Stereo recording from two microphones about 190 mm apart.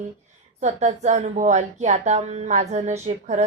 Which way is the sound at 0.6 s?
35° right (ahead or behind).